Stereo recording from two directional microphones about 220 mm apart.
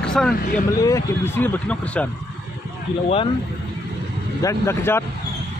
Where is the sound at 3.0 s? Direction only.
25° left (ahead or behind).